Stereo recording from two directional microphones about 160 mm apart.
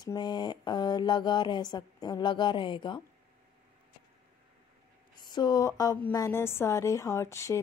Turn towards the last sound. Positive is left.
turn(degrees=20)  # may be behind; listen again after turning